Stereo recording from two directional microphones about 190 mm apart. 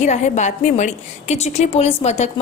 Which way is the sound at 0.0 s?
40° left (ahead or behind).